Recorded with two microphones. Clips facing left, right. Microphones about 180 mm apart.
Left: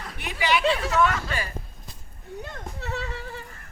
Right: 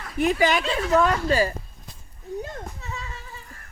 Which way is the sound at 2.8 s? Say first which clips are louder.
Left 5 dB; 65° left (ahead or behind).